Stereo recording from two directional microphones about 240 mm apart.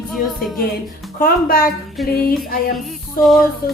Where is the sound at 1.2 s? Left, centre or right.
Left.